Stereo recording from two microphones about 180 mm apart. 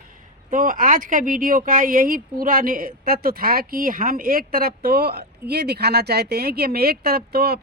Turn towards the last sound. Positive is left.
turn(degrees=-60)  # may be behind; listen again after turning